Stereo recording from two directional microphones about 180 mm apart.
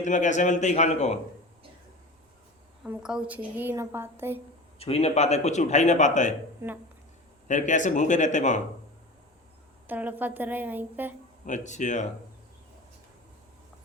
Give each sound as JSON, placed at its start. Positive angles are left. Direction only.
{"t": 0.0, "sound": "a man's voice", "side_deg": 45}
{"t": 2.8, "sound": "a woman's voice", "side_deg": -5}
{"t": 4.8, "sound": "a man's voice", "side_deg": 35}
{"t": 6.6, "sound": "a woman's voice", "side_deg": -15}
{"t": 7.4, "sound": "speech", "side_deg": 45}
{"t": 9.8, "sound": "a woman's voice", "side_deg": -10}
{"t": 11.4, "sound": "speech", "side_deg": 40}